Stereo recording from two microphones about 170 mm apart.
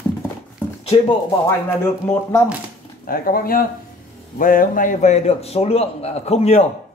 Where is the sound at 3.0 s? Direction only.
55° left (ahead or behind).